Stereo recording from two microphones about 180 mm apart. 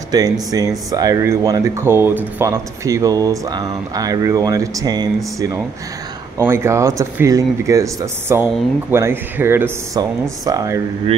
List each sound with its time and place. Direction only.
0.1 s speech: 20° right (ahead or behind)